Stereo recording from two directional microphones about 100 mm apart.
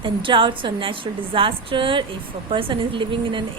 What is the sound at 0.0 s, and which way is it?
Speech, 55° right (ahead or behind).